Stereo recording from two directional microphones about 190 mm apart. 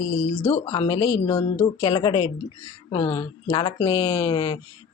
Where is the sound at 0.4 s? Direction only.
35° left (ahead or behind).